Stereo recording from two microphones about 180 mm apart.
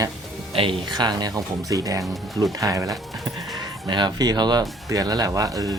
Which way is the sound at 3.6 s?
25° right (ahead or behind).